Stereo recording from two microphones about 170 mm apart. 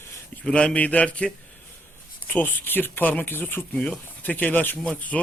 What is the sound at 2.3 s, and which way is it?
Speech, 10° left (ahead or behind).